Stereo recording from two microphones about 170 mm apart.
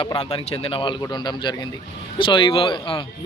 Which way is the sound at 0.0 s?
30° left (ahead or behind).